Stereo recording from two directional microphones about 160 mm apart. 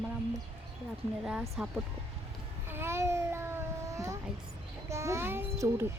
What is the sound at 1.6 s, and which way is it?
Speech, 5° right (ahead or behind).